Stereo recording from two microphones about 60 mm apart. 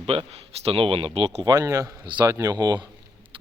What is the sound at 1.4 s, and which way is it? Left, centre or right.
Speech, right.